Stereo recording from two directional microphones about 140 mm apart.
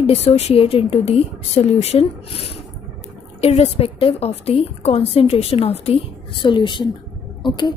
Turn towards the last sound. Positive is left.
turn(degrees=35)  # may be behind; listen again after turning